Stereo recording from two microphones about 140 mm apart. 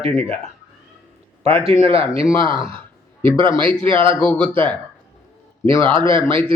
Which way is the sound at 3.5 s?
35° right (ahead or behind).